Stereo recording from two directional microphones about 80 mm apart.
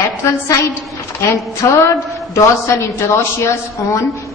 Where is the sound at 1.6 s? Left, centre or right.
Left.